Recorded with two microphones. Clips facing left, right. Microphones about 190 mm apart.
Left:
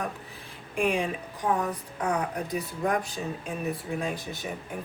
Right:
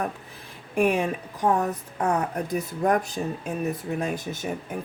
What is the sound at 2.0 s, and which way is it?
A woman's voice, 50° right (ahead or behind).